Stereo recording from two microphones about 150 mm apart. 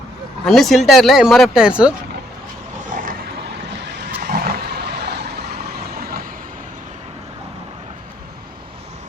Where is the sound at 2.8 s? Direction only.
60° right (ahead or behind).